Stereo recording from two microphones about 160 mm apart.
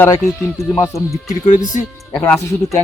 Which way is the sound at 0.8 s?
20° left (ahead or behind).